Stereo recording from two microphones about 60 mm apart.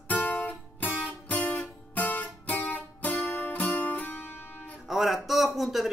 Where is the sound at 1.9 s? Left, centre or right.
Left.